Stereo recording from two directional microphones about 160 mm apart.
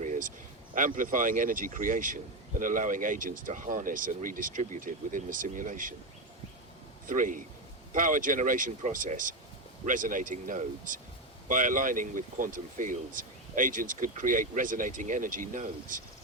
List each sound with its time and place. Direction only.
0.0 s speech: 55° right (ahead or behind)
7.1 s speech: 55° right (ahead or behind)